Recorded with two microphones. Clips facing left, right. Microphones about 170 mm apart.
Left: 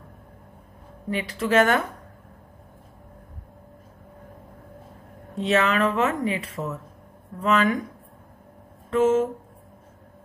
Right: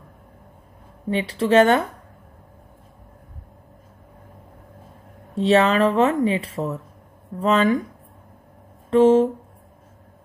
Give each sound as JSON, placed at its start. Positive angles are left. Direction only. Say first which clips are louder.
{"t": 1.1, "sound": "speech", "louder": "right 5 dB", "side_deg": -30}
{"t": 5.4, "sound": "speech", "louder": "right 5 dB", "side_deg": -30}
{"t": 8.9, "sound": "speech", "louder": "right 5 dB", "side_deg": -30}